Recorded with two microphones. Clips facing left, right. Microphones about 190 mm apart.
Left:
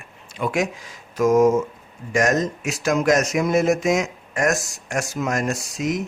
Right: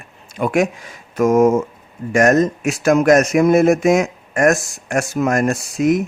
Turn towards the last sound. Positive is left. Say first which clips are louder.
# right 8 dB
turn(degrees=-55)  # may be behind; listen again after turning